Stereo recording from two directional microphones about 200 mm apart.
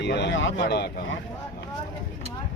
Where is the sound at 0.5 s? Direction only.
55° left (ahead or behind).